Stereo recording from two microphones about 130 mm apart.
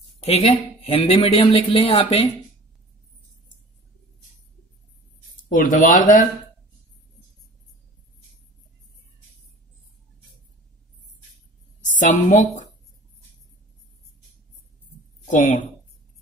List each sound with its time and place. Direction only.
0.2 s speech: 55° left (ahead or behind)
5.5 s speech: 90° left
11.8 s a woman's voice: 75° left (ahead or behind)
15.2 s a woman's voice: 70° left (ahead or behind)